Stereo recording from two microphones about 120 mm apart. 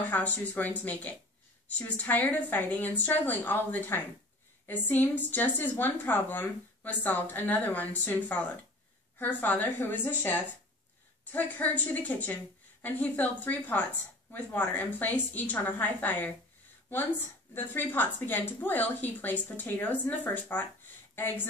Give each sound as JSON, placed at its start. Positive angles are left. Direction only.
{"t": 0.0, "sound": "a woman's voice", "side_deg": 15}
{"t": 17.6, "sound": "a woman's voice", "side_deg": 15}